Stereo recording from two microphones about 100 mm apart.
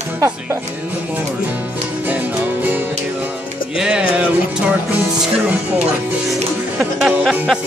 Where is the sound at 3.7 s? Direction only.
10° right (ahead or behind).